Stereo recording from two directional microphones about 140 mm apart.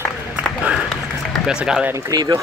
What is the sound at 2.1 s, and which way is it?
Speech, 30° right (ahead or behind).